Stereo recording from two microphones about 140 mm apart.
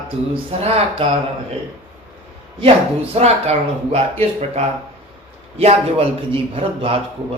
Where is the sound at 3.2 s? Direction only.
50° right (ahead or behind).